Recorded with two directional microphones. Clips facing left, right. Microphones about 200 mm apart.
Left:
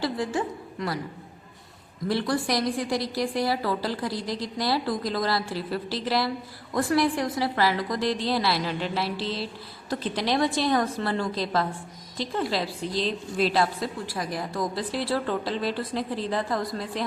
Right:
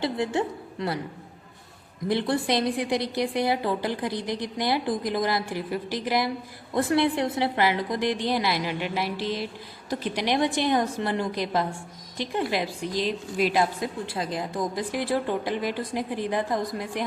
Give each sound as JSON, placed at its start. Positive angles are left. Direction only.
{"t": 0.0, "sound": "a woman's voice", "side_deg": -25}
{"t": 2.0, "sound": "a woman's voice", "side_deg": -20}